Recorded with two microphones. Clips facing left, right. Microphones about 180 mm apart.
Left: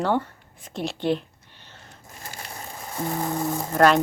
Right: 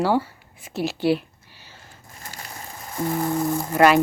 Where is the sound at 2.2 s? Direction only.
30° left (ahead or behind).